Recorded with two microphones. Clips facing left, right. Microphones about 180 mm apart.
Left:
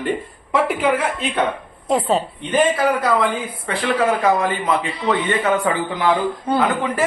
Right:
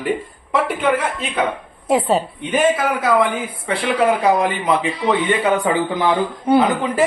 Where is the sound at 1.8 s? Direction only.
5° right (ahead or behind).